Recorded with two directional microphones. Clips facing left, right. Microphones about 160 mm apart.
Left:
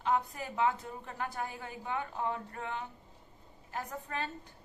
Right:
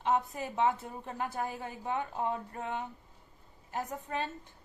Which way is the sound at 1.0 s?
30° right (ahead or behind).